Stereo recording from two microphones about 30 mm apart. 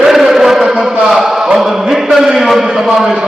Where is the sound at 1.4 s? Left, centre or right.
Centre.